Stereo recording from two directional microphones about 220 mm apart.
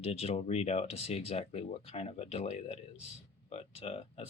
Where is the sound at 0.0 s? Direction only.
25° left (ahead or behind).